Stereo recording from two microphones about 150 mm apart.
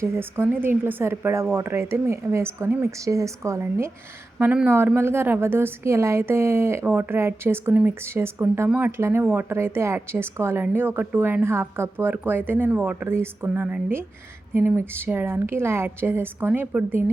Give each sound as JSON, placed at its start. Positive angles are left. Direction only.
{"t": 0.0, "sound": "a woman's voice", "side_deg": -15}